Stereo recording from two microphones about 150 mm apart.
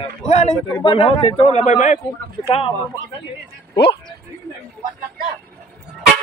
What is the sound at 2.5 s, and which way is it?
Speech, 35° left (ahead or behind).